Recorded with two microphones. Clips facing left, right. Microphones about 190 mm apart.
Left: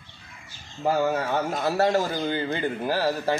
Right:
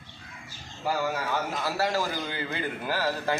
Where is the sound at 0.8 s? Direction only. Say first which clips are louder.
Left 6 dB; 40° left (ahead or behind).